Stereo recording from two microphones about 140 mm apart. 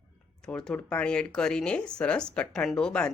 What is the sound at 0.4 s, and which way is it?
Speech, 5° left (ahead or behind).